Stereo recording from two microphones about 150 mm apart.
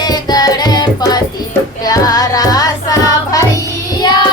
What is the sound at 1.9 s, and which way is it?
Music, 25° left (ahead or behind).